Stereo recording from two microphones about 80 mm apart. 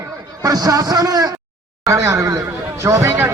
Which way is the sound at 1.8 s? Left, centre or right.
Right.